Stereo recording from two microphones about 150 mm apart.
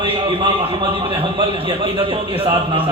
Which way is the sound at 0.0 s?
30° right (ahead or behind).